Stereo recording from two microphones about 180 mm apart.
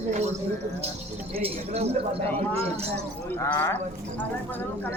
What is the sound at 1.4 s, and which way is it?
Speech, 35° right (ahead or behind).